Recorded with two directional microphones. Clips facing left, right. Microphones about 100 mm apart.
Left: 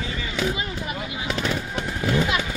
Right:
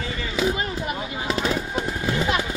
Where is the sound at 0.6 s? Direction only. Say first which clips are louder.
Right 2 dB; 45° right (ahead or behind).